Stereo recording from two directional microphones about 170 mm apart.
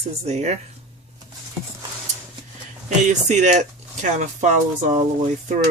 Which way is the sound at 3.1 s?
45° right (ahead or behind).